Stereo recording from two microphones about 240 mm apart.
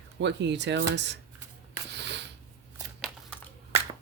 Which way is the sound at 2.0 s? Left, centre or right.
Right.